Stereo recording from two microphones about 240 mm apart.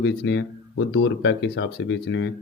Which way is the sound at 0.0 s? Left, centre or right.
Left.